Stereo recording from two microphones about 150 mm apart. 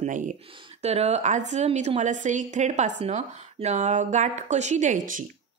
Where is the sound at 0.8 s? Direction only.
45° right (ahead or behind).